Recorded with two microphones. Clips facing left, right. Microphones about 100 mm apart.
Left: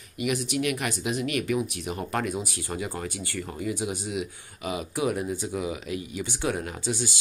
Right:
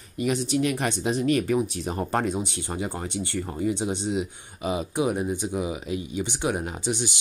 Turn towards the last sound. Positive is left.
turn(degrees=-20)  # may be behind; listen again after turning